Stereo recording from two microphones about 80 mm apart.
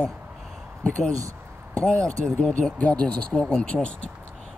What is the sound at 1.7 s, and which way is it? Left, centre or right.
Speech, centre.